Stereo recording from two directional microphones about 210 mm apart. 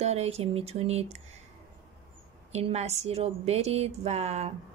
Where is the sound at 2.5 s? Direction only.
30° right (ahead or behind).